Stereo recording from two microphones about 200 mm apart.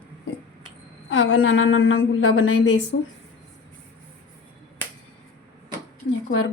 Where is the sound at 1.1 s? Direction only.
75° left (ahead or behind).